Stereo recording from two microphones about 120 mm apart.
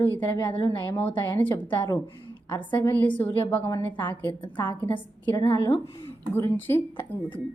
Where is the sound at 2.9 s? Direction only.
15° left (ahead or behind).